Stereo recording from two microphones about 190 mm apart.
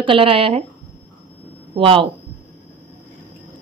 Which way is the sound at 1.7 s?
30° right (ahead or behind).